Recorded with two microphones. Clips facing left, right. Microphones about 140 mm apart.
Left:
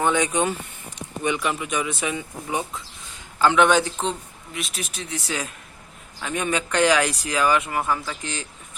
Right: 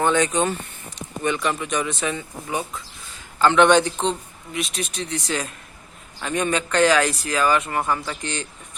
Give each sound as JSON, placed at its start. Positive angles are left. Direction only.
{"t": 0.0, "sound": "a man's voice", "side_deg": 10}